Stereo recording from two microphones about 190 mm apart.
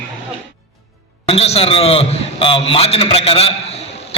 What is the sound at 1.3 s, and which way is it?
A man's voice, 30° left (ahead or behind).